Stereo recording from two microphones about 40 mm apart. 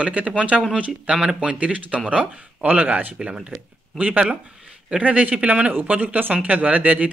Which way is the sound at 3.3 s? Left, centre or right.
Right.